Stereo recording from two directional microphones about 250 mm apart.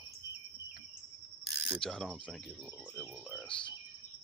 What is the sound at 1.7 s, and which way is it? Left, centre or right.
Speech, centre.